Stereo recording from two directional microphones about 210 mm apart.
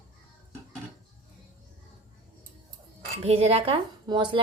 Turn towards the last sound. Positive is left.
turn(degrees=-20)  # may be behind; listen again after turning